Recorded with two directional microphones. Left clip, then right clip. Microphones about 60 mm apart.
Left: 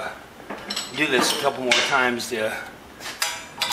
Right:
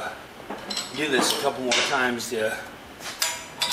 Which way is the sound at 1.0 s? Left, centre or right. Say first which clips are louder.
Left 2 dB; left.